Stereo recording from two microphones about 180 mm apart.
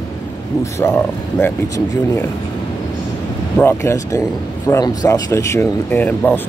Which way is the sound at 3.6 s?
15° left (ahead or behind).